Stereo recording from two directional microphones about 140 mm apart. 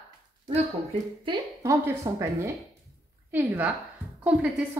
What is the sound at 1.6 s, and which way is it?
A woman's voice, 20° right (ahead or behind).